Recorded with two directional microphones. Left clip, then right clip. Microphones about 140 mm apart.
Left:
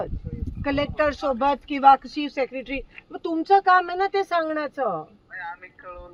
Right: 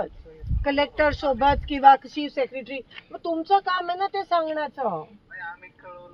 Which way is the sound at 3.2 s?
25° left (ahead or behind).